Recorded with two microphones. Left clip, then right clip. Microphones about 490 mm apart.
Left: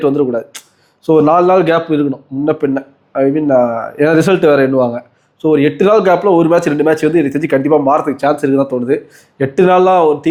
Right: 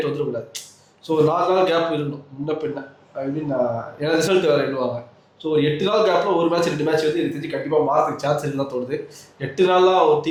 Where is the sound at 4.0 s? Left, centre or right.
Left.